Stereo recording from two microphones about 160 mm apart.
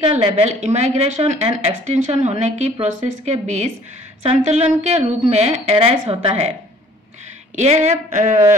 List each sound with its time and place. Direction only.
0.2 s a woman's voice: 40° right (ahead or behind)
7.5 s a woman's voice: 45° right (ahead or behind)